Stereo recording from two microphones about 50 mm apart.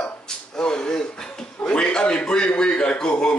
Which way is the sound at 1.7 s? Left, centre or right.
Centre.